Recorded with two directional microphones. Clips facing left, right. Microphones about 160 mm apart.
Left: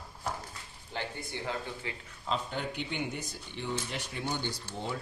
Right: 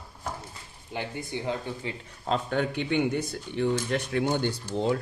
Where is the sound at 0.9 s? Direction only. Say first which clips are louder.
Right 5 dB; 15° right (ahead or behind).